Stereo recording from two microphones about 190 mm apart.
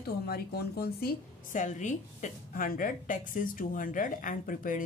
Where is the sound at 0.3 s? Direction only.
55° left (ahead or behind).